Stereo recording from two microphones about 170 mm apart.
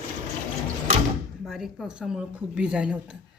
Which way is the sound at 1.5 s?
Centre (ahead or behind).